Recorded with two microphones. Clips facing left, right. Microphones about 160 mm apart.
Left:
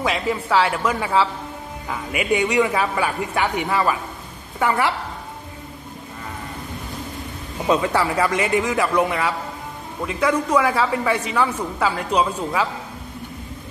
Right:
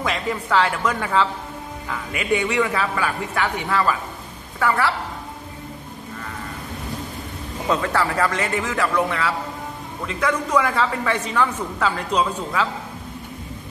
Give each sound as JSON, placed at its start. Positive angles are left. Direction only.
{"t": 0.0, "sound": "a woman's voice", "side_deg": 5}
{"t": 7.6, "sound": "a woman's voice", "side_deg": 15}